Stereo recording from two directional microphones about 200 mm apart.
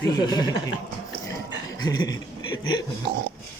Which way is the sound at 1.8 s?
20° left (ahead or behind).